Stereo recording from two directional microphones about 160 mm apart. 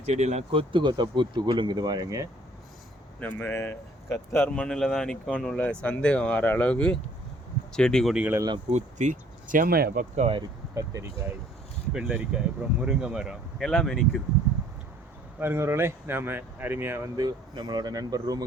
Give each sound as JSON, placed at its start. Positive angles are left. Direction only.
{"t": 0.0, "sound": "speech", "side_deg": -45}
{"t": 3.2, "sound": "speech", "side_deg": 10}
{"t": 8.4, "sound": "speech", "side_deg": -25}
{"t": 8.7, "sound": "speech", "side_deg": -50}
{"t": 10.2, "sound": "speech", "side_deg": -35}
{"t": 10.8, "sound": "speech", "side_deg": -20}
{"t": 11.9, "sound": "speech", "side_deg": -5}
{"t": 15.4, "sound": "speech", "side_deg": -15}
{"t": 17.2, "sound": "speech", "side_deg": -25}